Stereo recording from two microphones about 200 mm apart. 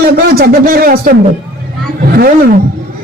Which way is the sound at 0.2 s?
50° right (ahead or behind).